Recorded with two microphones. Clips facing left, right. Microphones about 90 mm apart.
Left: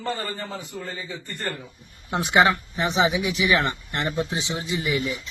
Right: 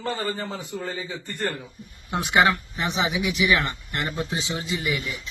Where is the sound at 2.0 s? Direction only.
25° left (ahead or behind).